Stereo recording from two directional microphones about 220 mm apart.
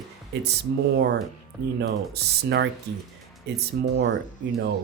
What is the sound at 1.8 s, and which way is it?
Speech, 50° right (ahead or behind).